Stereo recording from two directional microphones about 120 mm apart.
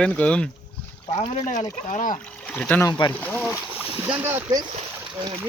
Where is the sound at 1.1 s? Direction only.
55° left (ahead or behind); by 2.1 s 85° left.